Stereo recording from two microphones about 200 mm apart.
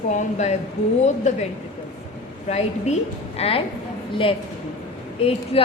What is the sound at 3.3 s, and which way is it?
Speech, 30° left (ahead or behind).